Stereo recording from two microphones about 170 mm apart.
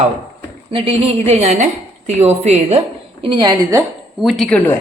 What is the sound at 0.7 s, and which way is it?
A woman's voice, 35° right (ahead or behind).